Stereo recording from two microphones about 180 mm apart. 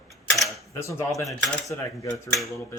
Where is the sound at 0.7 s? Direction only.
15° left (ahead or behind).